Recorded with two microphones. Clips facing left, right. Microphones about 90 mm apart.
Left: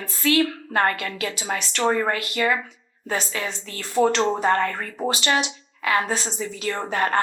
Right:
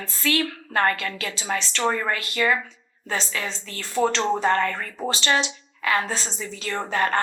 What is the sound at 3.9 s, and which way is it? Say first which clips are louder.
Speech: left 2 dB; 30° left (ahead or behind).